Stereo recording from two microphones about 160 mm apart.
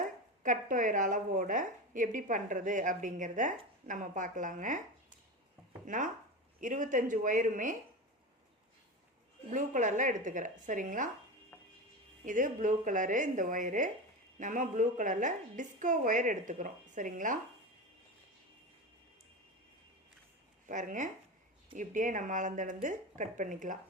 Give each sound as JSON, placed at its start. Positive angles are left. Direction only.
{"t": 0.0, "sound": "speech", "side_deg": -55}
{"t": 5.8, "sound": "speech", "side_deg": -55}
{"t": 9.5, "sound": "speech", "side_deg": -50}
{"t": 11.5, "sound": "music", "side_deg": 15}
{"t": 12.2, "sound": "speech", "side_deg": -55}
{"t": 20.7, "sound": "speech", "side_deg": -55}